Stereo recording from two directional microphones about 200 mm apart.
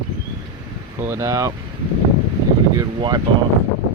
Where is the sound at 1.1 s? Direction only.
15° right (ahead or behind).